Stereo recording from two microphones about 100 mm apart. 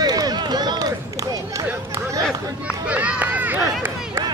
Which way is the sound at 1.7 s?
25° right (ahead or behind).